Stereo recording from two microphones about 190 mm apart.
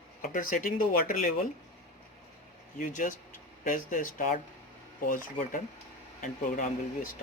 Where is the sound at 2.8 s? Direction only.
45° left (ahead or behind).